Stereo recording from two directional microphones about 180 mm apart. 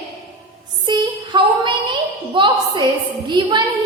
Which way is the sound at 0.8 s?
25° right (ahead or behind).